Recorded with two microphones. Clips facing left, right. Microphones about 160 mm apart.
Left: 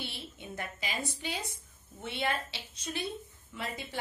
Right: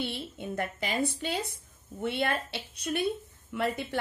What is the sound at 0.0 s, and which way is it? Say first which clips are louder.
A woman's voice: right 8 dB; 55° right (ahead or behind).